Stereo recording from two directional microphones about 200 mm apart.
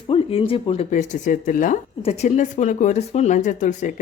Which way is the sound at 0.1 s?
25° left (ahead or behind).